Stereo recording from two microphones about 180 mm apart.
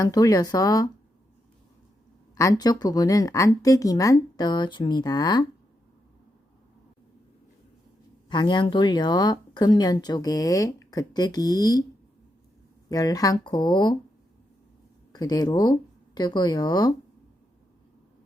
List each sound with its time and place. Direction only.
0.0 s speech: 20° left (ahead or behind)
2.3 s speech: 20° left (ahead or behind)
8.3 s speech: 25° left (ahead or behind)
12.9 s speech: 20° left (ahead or behind)
15.1 s speech: 20° left (ahead or behind)